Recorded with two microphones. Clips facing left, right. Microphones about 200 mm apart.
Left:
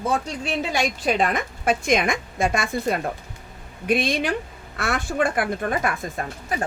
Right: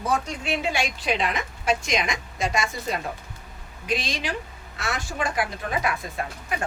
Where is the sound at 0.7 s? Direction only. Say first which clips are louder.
Left 4 dB; 45° left (ahead or behind).